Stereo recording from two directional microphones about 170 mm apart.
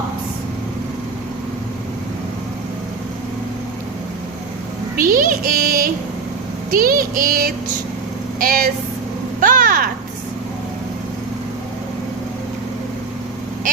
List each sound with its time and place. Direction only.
4.9 s child singing: 55° right (ahead or behind)
8.4 s speech: 50° right (ahead or behind)
9.4 s a sound: 50° right (ahead or behind)